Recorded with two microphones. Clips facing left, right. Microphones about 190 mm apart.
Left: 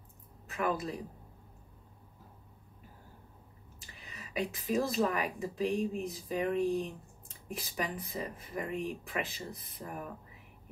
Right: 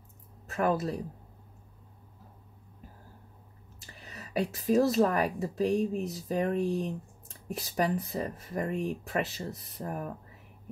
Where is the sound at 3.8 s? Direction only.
40° right (ahead or behind).